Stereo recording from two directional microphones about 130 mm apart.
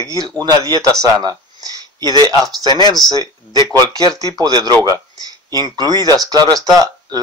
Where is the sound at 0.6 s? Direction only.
30° right (ahead or behind).